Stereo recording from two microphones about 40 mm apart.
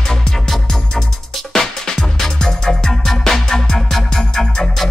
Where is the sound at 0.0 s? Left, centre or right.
Centre.